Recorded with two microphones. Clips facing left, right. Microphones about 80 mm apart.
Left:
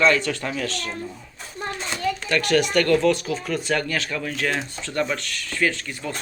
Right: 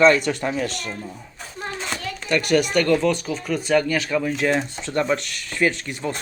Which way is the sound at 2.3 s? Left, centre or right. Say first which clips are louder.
Right 3 dB; centre.